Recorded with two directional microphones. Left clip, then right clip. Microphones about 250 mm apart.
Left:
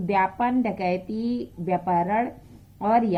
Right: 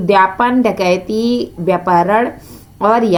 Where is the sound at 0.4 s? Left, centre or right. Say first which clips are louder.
Right 11 dB; right.